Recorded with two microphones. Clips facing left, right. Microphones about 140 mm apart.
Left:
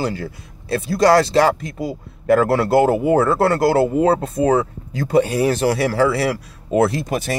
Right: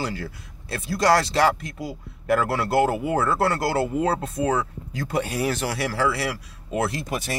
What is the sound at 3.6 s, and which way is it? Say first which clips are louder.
Speech: left 8 dB; 25° left (ahead or behind).